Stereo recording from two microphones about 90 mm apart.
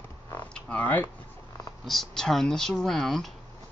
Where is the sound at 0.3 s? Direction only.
15° left (ahead or behind).